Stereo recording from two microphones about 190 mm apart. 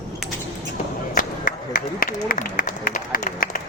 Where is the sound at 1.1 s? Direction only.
45° left (ahead or behind).